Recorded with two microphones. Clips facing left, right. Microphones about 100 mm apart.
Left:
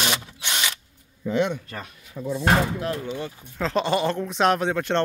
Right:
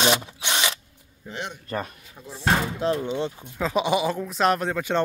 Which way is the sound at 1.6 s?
45° right (ahead or behind).